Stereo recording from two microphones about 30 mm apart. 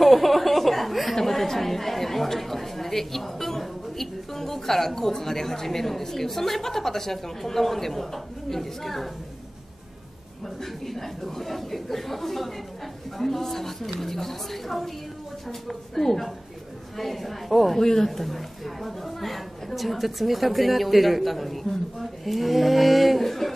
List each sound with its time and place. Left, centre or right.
0.0 s speech: centre
10.6 s speech: centre
15.9 s a woman's voice: centre
17.7 s a woman's voice: centre